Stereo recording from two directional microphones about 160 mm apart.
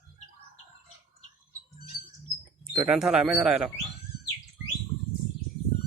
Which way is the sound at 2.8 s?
5° right (ahead or behind).